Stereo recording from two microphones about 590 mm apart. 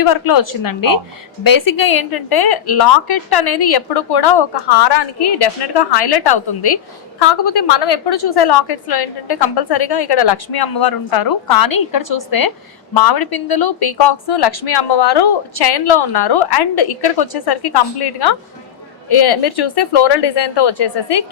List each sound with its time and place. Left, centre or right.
0.0 s a woman's voice: left